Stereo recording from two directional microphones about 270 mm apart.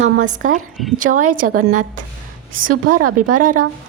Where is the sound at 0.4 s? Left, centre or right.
Right.